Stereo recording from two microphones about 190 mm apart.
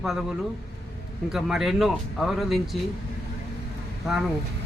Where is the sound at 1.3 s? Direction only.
Centre (ahead or behind).